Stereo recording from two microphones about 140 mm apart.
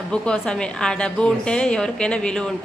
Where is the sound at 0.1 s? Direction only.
5° left (ahead or behind).